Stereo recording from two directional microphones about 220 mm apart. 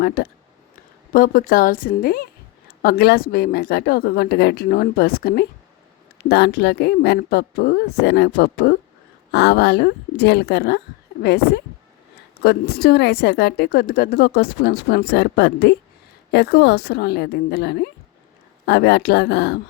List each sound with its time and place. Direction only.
0.0 s a woman's voice: 45° left (ahead or behind)